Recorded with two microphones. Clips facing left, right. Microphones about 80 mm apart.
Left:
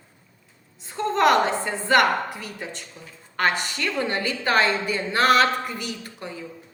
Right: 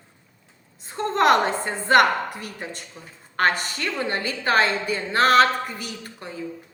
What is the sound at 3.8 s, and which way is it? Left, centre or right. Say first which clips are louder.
A woman's voice: left 1 dB; right.